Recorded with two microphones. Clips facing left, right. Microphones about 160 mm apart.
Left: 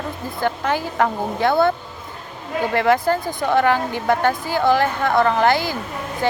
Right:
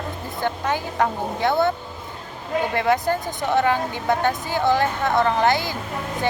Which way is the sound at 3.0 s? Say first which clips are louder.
Left 3 dB; 20° right (ahead or behind).